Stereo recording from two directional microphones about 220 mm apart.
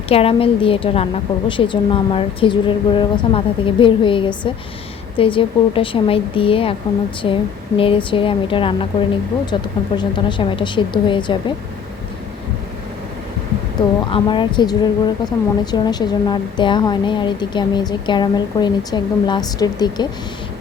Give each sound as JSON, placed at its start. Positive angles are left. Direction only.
{"t": 0.1, "sound": "a woman's voice", "side_deg": 25}
{"t": 7.8, "sound": "a woman's voice", "side_deg": 25}
{"t": 14.0, "sound": "a woman's voice", "side_deg": 20}